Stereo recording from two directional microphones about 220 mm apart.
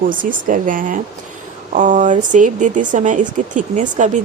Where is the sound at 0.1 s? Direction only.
40° right (ahead or behind).